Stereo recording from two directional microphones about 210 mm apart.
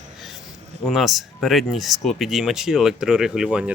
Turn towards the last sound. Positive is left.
turn(degrees=-5)  # may be behind; listen again after turning